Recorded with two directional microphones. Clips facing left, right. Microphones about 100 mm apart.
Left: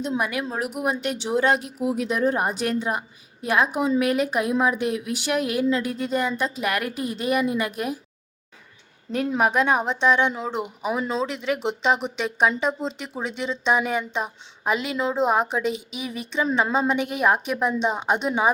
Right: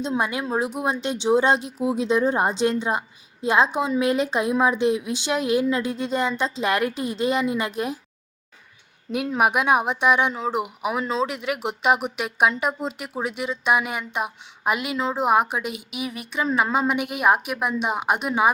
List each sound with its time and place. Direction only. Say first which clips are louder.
0.0 s speech: right 1 dB; 25° right (ahead or behind)
9.4 s speech: right 2 dB; 10° right (ahead or behind)